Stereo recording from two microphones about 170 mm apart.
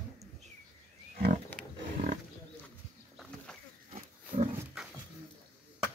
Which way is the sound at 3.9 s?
35° right (ahead or behind).